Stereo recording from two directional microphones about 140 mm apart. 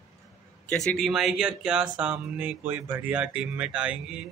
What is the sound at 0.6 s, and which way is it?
Speech, 5° left (ahead or behind).